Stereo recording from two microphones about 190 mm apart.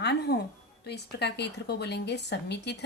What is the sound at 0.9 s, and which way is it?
Speech, 60° left (ahead or behind).